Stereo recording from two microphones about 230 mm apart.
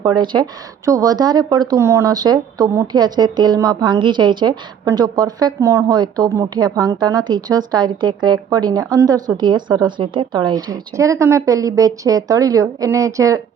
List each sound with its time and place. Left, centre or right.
0.2 s speech: centre